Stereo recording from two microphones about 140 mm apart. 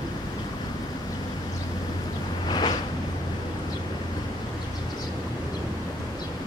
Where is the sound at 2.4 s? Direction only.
35° left (ahead or behind).